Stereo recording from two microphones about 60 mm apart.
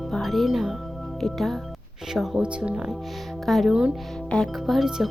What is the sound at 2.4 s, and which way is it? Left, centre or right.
Speech, centre.